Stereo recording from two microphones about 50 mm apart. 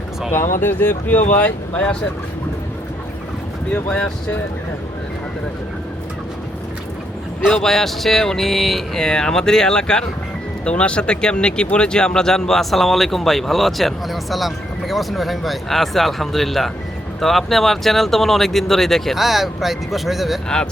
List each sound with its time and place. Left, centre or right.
0.3 s speech: left
3.7 s speech: centre
7.5 s speech: centre